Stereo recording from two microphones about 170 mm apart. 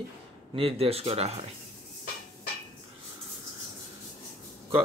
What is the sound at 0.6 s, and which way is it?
Speech, 35° right (ahead or behind).